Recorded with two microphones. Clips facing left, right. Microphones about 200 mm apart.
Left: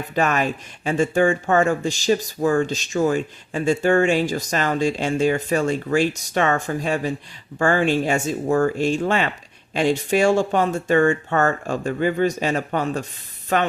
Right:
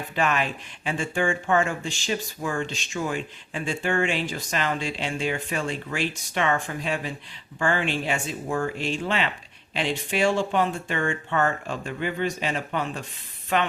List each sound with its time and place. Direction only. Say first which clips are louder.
0.1 s speech: left 4 dB; 45° left (ahead or behind)